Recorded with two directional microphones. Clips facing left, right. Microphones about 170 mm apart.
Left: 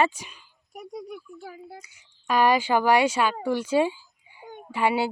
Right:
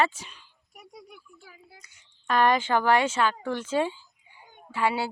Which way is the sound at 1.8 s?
10° left (ahead or behind).